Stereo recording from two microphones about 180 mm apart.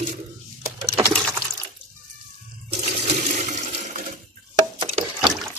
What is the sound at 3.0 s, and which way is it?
Toilet flush, 45° right (ahead or behind).